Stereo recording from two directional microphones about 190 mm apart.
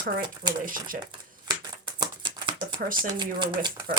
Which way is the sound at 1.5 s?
20° right (ahead or behind).